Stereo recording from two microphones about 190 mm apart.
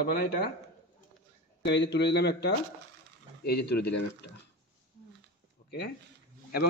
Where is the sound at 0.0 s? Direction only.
55° left (ahead or behind).